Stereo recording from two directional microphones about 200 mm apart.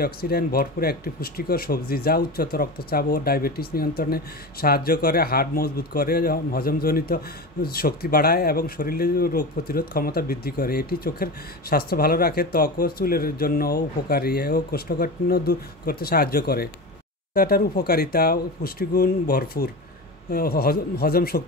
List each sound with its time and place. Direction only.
0.0 s speech: 50° left (ahead or behind)